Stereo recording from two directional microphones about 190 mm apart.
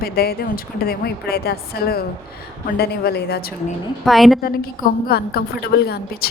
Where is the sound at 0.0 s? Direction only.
55° left (ahead or behind).